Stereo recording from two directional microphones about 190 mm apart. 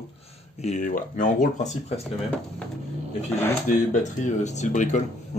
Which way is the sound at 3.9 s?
40° left (ahead or behind).